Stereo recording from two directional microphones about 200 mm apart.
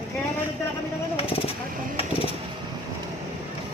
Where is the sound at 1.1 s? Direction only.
30° left (ahead or behind).